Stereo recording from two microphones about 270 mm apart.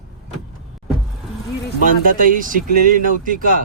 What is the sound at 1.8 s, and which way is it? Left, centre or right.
Speech, right.